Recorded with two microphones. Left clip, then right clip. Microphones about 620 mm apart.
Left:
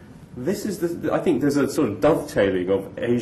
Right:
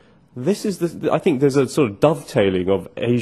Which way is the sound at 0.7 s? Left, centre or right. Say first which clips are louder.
Right 4 dB; right.